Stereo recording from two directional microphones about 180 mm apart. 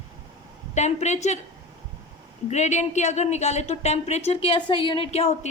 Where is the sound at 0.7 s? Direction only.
40° left (ahead or behind).